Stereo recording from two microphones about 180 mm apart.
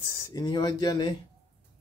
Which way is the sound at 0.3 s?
20° left (ahead or behind).